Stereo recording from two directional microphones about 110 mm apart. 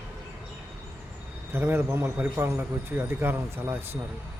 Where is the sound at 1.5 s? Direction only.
20° right (ahead or behind).